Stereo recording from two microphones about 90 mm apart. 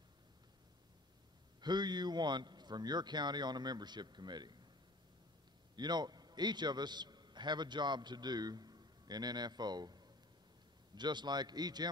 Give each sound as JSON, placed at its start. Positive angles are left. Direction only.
{"t": 1.6, "sound": "speech", "side_deg": -55}
{"t": 5.8, "sound": "a man's voice", "side_deg": -50}